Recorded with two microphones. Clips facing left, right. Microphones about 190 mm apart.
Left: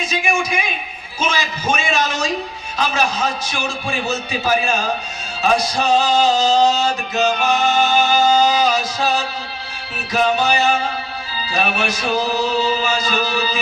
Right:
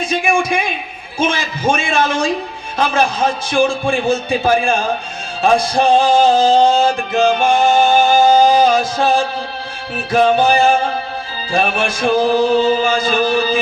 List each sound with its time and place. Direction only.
0.0 s a man's voice: 55° right (ahead or behind)
1.2 s music: 55° right (ahead or behind)